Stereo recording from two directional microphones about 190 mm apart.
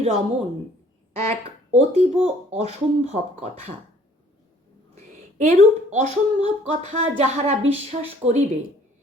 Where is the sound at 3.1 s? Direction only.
35° right (ahead or behind).